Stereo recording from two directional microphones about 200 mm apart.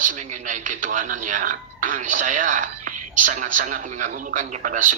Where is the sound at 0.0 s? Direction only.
40° right (ahead or behind).